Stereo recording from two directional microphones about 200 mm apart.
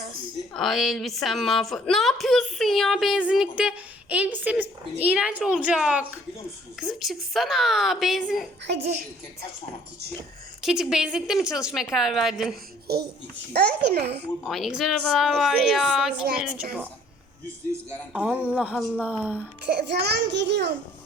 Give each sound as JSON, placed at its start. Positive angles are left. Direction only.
{"t": 0.5, "sound": "a woman's voice", "side_deg": 0}
{"t": 8.7, "sound": "a child's voice", "side_deg": -55}
{"t": 10.6, "sound": "a woman's voice", "side_deg": 0}
{"t": 12.9, "sound": "a child's voice", "side_deg": -50}
{"t": 14.4, "sound": "a woman's voice", "side_deg": 0}
{"t": 18.1, "sound": "speech", "side_deg": -5}
{"t": 19.6, "sound": "a child's voice", "side_deg": -55}